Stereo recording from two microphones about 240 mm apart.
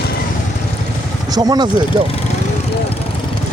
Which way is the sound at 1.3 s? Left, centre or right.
Centre.